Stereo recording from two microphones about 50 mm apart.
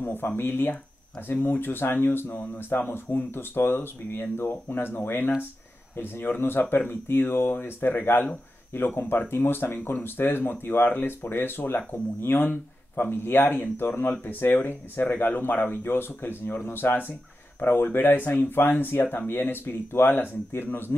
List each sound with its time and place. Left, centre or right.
0.0 s speech: left